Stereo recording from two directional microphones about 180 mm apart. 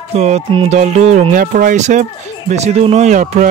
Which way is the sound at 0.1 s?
35° right (ahead or behind).